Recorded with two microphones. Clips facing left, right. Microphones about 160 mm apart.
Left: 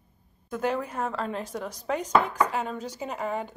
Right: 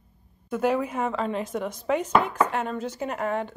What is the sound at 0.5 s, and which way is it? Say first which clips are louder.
Chopping: right 4 dB; 5° right (ahead or behind).